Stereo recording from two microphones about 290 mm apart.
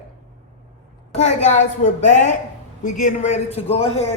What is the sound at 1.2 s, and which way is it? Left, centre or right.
A man's voice, left.